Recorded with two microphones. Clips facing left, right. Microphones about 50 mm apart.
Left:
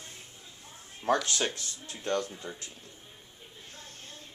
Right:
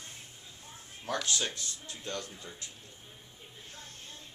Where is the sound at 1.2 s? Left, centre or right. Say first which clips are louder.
Left 2 dB; left.